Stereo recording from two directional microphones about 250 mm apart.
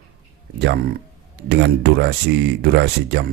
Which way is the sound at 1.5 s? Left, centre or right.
Right.